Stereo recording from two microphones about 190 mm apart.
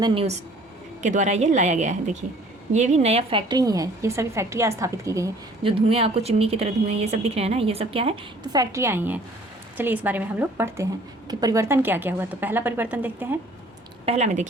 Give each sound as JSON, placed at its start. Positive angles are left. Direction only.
{"t": 0.0, "sound": "a woman's voice", "side_deg": -30}
{"t": 5.6, "sound": "speech", "side_deg": -30}
{"t": 8.7, "sound": "a woman's voice", "side_deg": -15}
{"t": 14.0, "sound": "speech", "side_deg": -35}